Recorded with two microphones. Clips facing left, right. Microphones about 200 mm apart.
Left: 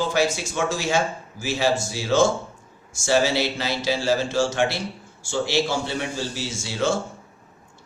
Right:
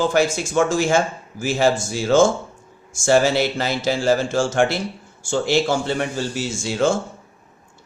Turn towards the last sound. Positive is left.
turn(degrees=-50)  # may be behind; listen again after turning